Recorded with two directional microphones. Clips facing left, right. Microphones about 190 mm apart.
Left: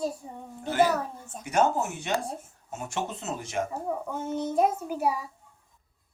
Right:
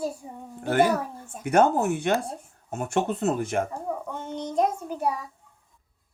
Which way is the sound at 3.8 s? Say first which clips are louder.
Even; 5° left (ahead or behind).